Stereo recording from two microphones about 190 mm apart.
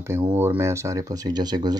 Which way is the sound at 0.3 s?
10° right (ahead or behind).